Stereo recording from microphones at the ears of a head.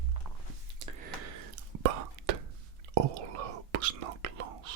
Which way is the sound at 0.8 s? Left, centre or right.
Right.